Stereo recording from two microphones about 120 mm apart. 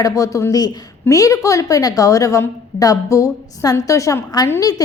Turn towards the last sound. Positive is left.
turn(degrees=30)  # may be behind; listen again after turning